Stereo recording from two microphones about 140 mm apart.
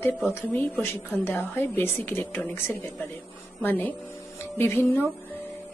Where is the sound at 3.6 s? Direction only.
15° left (ahead or behind).